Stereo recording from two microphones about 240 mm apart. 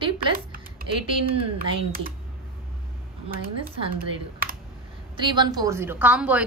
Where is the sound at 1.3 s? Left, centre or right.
Right.